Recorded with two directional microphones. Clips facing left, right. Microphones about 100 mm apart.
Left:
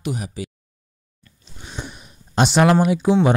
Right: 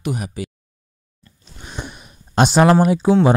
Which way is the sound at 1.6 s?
55° right (ahead or behind).